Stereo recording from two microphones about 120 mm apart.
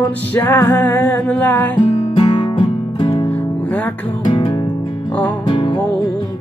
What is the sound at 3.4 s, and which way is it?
Music, 15° left (ahead or behind).